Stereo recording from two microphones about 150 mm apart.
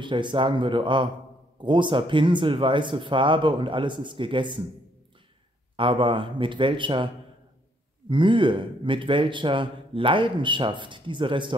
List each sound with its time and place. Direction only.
0.0 s speech: 30° right (ahead or behind)
5.8 s speech: 35° right (ahead or behind)
8.1 s speech: 35° right (ahead or behind)